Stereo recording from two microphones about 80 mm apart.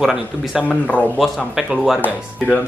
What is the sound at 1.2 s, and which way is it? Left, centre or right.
Speech, centre.